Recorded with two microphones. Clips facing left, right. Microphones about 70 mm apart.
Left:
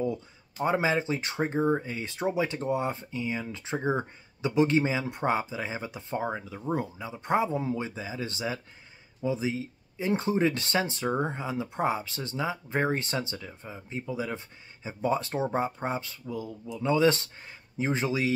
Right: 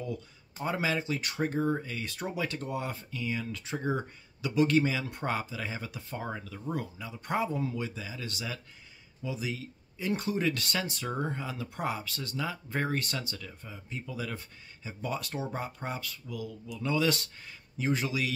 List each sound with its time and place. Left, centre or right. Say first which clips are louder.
0.7 s speech: left 5 dB; left